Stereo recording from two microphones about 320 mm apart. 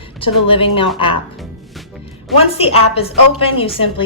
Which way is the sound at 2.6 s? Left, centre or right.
Centre.